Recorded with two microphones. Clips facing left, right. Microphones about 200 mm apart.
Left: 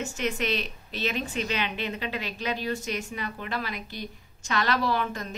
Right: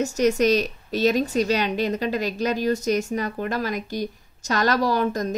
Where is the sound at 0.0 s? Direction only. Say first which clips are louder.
Right 10 dB; 40° right (ahead or behind).